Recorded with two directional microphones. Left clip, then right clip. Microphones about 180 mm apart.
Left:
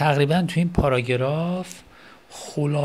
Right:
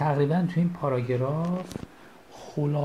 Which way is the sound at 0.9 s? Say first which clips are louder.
Left 6 dB; 50° left (ahead or behind).